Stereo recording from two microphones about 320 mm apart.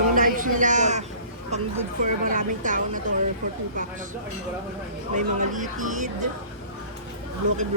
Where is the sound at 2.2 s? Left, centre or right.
Right.